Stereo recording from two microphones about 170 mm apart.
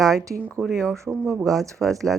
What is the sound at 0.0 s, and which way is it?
Speech, centre (ahead or behind).